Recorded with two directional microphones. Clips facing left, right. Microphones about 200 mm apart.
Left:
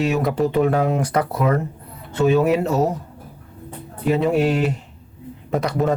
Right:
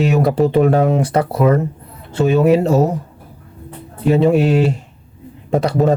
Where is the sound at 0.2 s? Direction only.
30° right (ahead or behind).